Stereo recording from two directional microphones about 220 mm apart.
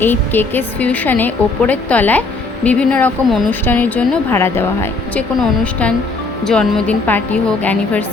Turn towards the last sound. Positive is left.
turn(degrees=5)  # may be behind; listen again after turning